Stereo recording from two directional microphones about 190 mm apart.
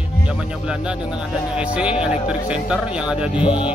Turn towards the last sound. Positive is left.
turn(degrees=25)  # may be behind; listen again after turning